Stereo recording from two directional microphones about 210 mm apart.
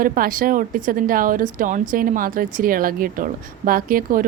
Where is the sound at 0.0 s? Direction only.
40° right (ahead or behind).